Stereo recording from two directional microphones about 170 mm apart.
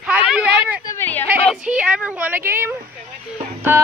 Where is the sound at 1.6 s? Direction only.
5° right (ahead or behind).